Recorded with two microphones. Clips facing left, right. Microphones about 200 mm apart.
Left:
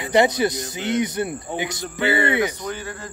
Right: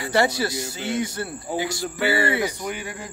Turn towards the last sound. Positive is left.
turn(degrees=-15)  # may be behind; listen again after turning